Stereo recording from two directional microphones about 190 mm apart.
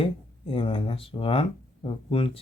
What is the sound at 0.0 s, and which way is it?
Speech, 30° left (ahead or behind).